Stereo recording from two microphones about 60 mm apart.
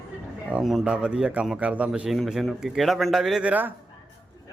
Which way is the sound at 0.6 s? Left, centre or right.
Centre.